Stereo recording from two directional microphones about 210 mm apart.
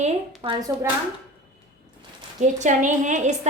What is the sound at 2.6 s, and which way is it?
Speech, 35° right (ahead or behind).